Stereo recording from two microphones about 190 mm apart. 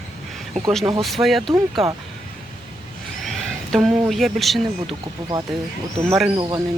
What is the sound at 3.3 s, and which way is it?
Speech, centre (ahead or behind).